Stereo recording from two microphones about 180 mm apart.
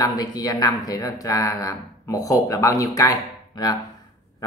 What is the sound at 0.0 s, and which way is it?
Speech, 20° left (ahead or behind).